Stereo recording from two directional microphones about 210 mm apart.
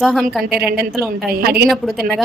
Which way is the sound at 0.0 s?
Centre (ahead or behind).